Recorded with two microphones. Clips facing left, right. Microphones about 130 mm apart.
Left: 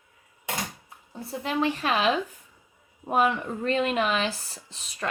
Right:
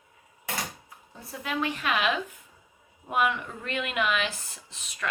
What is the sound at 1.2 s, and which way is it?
Speech, 30° left (ahead or behind).